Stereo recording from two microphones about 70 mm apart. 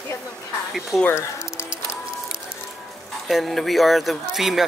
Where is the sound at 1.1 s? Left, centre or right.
Left.